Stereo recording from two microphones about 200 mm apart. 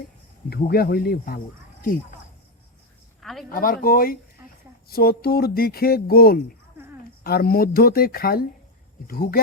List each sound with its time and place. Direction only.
0.5 s speech: 50° left (ahead or behind)
3.2 s a sound: centre (ahead or behind)
3.5 s speech: 45° left (ahead or behind)